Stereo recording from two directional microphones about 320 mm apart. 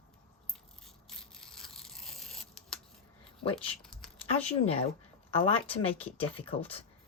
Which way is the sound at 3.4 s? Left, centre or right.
Centre.